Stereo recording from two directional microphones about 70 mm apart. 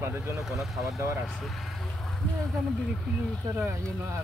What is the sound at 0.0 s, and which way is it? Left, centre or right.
Speech, right.